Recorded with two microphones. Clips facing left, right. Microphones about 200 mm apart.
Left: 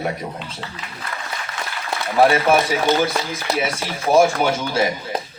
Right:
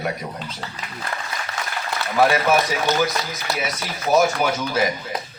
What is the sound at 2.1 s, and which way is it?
Speech, 30° left (ahead or behind).